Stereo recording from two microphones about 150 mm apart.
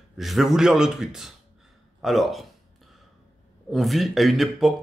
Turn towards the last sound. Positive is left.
turn(degrees=0)  # may be behind; listen again after turning